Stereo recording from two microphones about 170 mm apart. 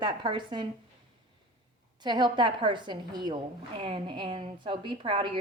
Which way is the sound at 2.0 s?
25° right (ahead or behind).